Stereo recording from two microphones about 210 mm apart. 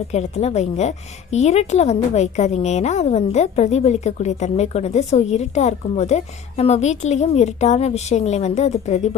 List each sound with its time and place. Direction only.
0.1 s a woman's voice: 30° left (ahead or behind)